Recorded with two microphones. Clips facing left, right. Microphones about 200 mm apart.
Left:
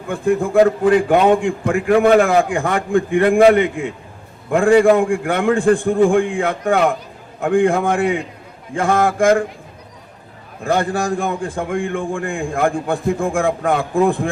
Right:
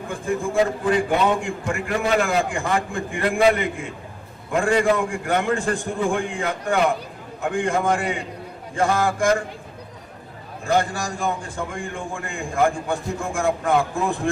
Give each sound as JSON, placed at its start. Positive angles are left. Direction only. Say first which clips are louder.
{"t": 0.1, "sound": "a man's voice", "louder": "left 8 dB", "side_deg": 60}
{"t": 10.6, "sound": "a man's voice", "louder": "left 4 dB", "side_deg": 55}